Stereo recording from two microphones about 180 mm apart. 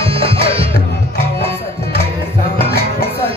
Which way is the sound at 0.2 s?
30° right (ahead or behind).